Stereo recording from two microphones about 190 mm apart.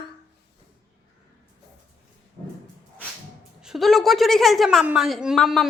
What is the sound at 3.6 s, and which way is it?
A woman's voice, centre (ahead or behind).